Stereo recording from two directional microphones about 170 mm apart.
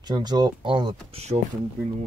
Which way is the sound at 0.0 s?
25° right (ahead or behind).